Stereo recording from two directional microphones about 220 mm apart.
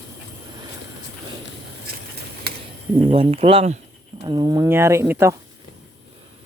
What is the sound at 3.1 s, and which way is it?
Speech, 25° right (ahead or behind).